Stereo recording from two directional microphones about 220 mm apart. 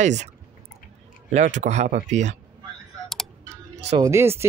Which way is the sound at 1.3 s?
35° right (ahead or behind).